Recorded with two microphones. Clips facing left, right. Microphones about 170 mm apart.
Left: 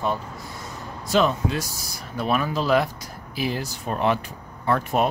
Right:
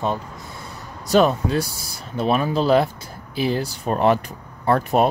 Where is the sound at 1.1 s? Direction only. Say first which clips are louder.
Right 4 dB; 40° right (ahead or behind).